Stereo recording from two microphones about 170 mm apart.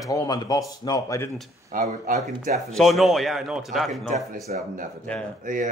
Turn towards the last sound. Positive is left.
turn(degrees=-50)  # may be behind; listen again after turning